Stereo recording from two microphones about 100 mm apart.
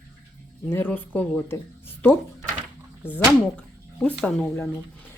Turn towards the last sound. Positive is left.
turn(degrees=10)  # may be behind; listen again after turning